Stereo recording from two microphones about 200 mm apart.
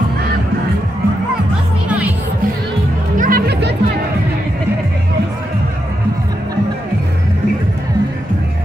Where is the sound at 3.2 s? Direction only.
45° right (ahead or behind).